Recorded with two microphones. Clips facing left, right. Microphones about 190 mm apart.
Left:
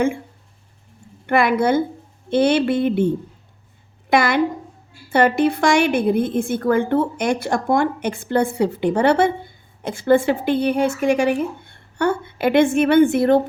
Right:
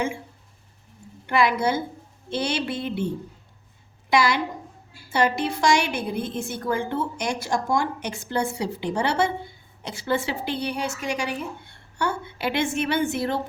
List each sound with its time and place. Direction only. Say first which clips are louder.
1.3 s a woman's voice: left 5 dB; 55° left (ahead or behind)
4.1 s a woman's voice: left 5 dB; 55° left (ahead or behind)